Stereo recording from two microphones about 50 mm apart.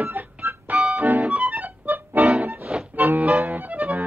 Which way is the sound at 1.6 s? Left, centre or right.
Right.